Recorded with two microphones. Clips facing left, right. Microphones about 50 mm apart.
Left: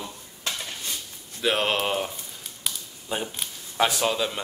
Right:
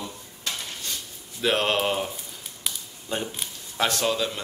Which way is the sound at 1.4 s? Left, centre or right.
Centre.